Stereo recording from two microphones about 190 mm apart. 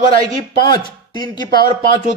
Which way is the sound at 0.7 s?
25° left (ahead or behind).